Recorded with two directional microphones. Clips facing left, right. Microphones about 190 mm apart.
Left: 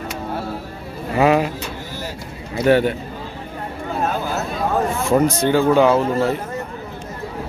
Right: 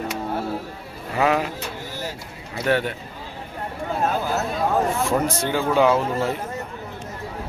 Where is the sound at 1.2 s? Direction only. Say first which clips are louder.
Left 5 dB; 15° left (ahead or behind).